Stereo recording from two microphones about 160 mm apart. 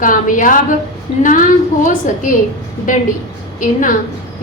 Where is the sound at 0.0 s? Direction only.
55° left (ahead or behind).